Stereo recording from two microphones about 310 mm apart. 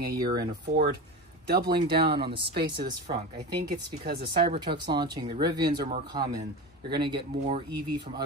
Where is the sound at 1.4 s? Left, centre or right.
Right.